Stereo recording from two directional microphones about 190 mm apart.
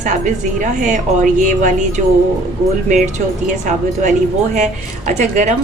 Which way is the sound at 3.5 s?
40° right (ahead or behind).